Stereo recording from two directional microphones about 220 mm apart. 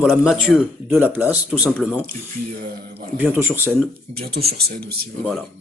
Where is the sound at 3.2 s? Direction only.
10° right (ahead or behind).